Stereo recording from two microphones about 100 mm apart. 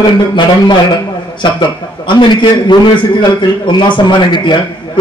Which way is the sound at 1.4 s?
55° left (ahead or behind).